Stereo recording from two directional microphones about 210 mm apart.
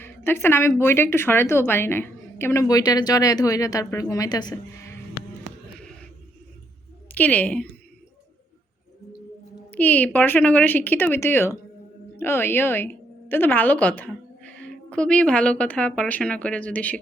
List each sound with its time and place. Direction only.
0.0 s a woman's voice: 10° left (ahead or behind)
7.1 s a woman's voice: 5° left (ahead or behind)
9.6 s a woman's voice: 10° left (ahead or behind)